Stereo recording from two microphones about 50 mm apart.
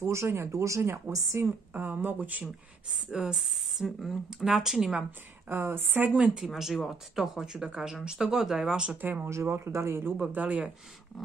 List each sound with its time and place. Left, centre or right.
0.0 s speech: right
1.4 s speech: right
1.7 s speech: right
2.9 s speech: centre
3.3 s speech: centre
5.5 s a woman's voice: right
6.0 s speech: right
6.4 s speech: centre
8.9 s speech: right
9.2 s speech: right
10.3 s speech: right